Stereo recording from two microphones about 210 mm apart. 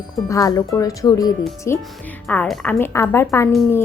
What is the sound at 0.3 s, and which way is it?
Speech, 15° left (ahead or behind).